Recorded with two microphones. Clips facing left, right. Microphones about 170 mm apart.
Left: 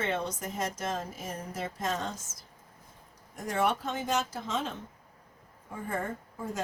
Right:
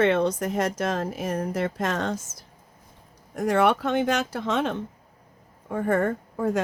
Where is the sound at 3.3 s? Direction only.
70° right (ahead or behind).